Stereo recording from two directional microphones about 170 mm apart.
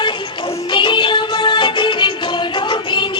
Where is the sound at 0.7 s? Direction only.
30° left (ahead or behind).